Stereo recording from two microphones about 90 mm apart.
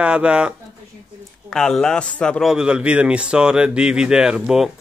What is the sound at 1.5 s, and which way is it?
Speech, 5° left (ahead or behind).